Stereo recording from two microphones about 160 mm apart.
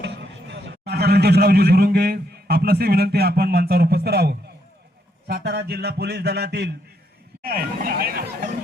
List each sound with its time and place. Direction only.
0.0 s a man's voice: 90° right
5.3 s a sound: 85° right
7.4 s speech: 65° right (ahead or behind)